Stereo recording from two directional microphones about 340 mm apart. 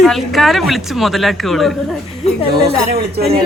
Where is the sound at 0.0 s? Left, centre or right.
Centre.